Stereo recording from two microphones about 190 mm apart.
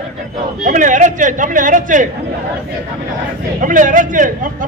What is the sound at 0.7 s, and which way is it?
A man's voice, 45° right (ahead or behind).